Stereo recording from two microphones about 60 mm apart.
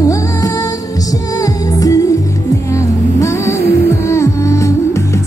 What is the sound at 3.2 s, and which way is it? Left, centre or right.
Music, left.